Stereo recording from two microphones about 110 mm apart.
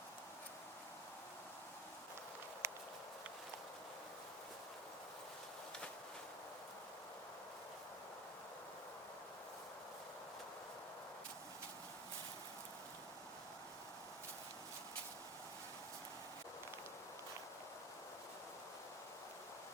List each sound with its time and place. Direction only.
2.6 s walk: 25° right (ahead or behind)